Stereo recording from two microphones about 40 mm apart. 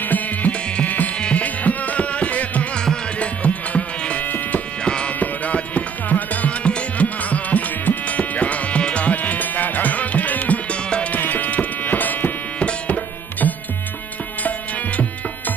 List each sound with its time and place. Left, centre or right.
0.8 s insect: left
3.2 s music: left
4.8 s music: left
5.2 s music: left
10.7 s mosquito: left
11.1 s a sound: left
12.8 s music: left